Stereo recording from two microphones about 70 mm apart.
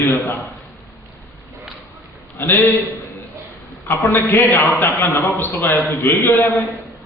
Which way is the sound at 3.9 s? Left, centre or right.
Left.